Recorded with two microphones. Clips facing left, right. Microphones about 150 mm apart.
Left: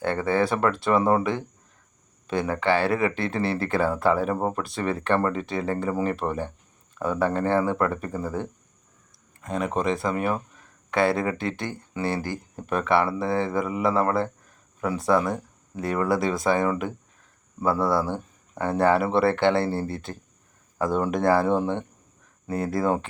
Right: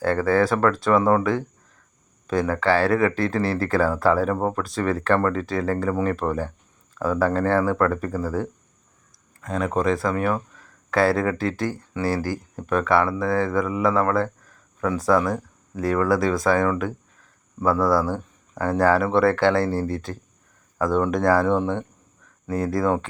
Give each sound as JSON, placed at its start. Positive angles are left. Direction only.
{"t": 0.0, "sound": "speech", "side_deg": 20}